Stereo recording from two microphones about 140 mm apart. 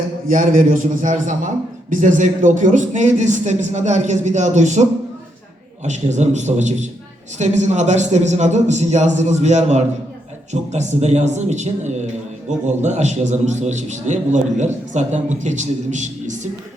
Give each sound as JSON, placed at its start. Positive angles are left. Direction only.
{"t": 0.3, "sound": "a man's voice", "side_deg": -70}